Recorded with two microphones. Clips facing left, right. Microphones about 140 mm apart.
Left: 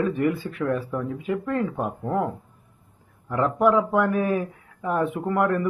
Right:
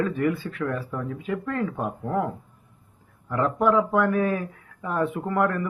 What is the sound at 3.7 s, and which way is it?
Speech, 15° left (ahead or behind).